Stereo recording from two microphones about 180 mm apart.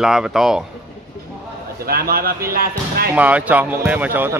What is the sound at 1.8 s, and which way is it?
Speech, 55° right (ahead or behind).